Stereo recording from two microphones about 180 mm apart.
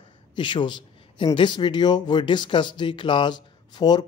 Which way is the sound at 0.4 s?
25° left (ahead or behind).